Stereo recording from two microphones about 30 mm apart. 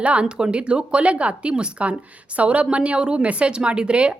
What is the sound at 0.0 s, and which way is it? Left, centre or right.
Speech, right.